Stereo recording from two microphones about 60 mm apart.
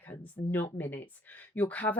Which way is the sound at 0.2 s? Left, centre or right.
Left.